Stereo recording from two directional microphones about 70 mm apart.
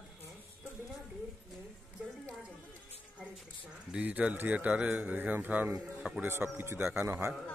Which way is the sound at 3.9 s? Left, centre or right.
Centre.